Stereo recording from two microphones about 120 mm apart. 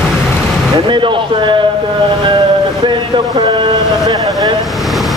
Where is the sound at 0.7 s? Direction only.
45° right (ahead or behind).